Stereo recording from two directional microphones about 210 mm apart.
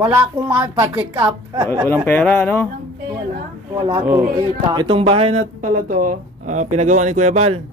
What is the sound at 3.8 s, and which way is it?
A man's voice, 20° right (ahead or behind).